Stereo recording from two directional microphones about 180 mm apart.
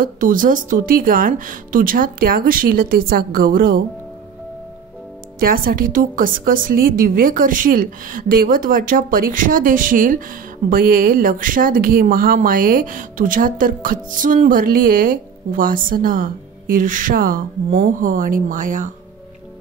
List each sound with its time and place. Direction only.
0.0 s speech: 50° right (ahead or behind)
5.4 s speech: 55° right (ahead or behind)